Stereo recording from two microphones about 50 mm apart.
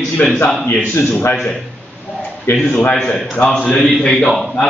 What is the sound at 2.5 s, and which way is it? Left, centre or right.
Speech, left.